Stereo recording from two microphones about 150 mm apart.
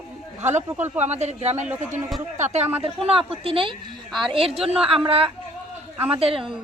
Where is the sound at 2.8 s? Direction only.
40° right (ahead or behind).